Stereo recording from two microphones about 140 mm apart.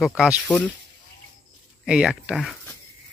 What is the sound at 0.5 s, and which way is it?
Speech, 10° left (ahead or behind).